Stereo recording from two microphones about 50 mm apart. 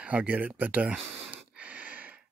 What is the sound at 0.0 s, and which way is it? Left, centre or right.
Speech, right.